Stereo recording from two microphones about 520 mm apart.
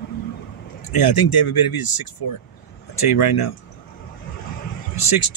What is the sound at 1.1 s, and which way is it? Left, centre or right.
Speech, left.